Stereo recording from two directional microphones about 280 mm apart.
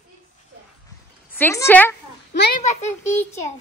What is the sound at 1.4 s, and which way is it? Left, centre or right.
Speech, centre.